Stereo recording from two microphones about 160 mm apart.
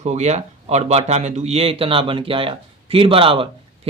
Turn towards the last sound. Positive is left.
turn(degrees=-35)  # may be behind; listen again after turning